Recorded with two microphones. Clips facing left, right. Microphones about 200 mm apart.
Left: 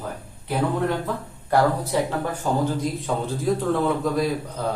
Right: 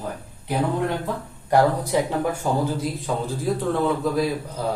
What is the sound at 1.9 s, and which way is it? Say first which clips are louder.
Speech: right 2 dB; 10° right (ahead or behind).